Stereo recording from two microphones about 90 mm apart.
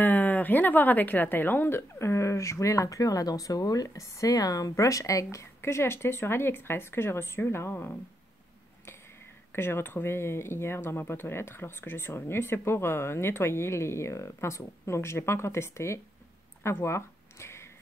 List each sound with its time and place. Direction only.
0.0 s a woman's voice: 20° left (ahead or behind)
9.5 s a woman's voice: 25° left (ahead or behind)
16.6 s a sound: 30° left (ahead or behind)